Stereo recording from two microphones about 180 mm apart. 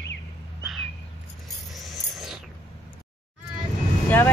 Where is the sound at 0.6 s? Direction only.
Centre (ahead or behind).